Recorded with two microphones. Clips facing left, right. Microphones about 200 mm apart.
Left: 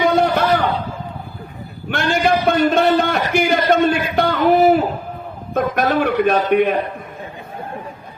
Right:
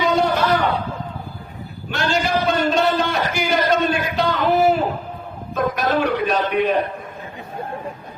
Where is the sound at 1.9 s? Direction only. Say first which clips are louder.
Left 4 dB; 55° left (ahead or behind).